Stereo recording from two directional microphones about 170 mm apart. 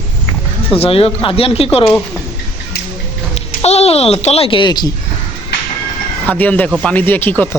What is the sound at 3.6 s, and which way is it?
Speech, 40° left (ahead or behind).